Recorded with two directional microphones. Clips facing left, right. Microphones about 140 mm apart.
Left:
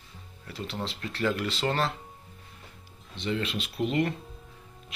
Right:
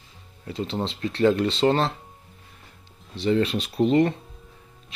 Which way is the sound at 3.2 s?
40° right (ahead or behind).